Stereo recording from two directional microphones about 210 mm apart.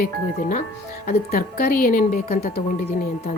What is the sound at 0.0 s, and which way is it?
A woman's voice, 45° left (ahead or behind).